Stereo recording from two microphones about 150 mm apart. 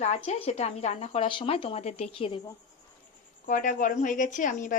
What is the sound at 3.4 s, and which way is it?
A woman's voice, 60° left (ahead or behind).